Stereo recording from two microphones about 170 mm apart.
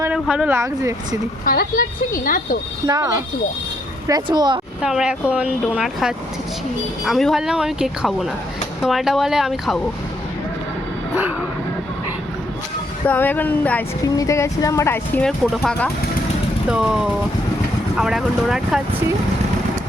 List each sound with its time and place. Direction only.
0.0 s speech: 5° right (ahead or behind)
1.5 s a woman's voice: 55° left (ahead or behind)
2.8 s speech: 20° right (ahead or behind)
4.8 s speech: 5° right (ahead or behind)
13.1 s speech: 10° left (ahead or behind)